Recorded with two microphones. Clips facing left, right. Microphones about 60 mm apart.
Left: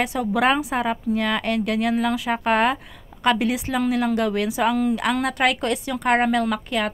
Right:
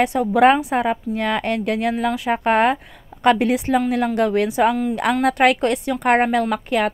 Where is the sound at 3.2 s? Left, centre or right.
Right.